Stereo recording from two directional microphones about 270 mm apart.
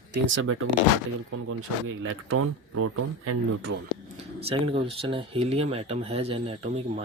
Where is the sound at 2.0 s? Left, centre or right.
Right.